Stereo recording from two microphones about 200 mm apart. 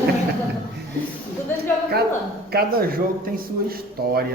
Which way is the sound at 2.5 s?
50° right (ahead or behind).